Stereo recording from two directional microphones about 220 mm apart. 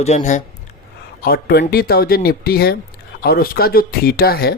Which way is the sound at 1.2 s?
45° left (ahead or behind).